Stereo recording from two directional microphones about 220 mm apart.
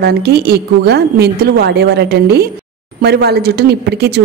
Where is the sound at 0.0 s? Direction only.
45° right (ahead or behind).